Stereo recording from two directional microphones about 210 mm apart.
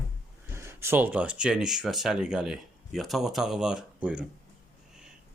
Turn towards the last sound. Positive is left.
turn(degrees=-5)  # may be behind; listen again after turning